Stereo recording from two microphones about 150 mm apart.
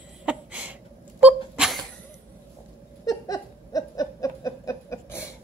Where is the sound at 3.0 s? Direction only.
25° left (ahead or behind).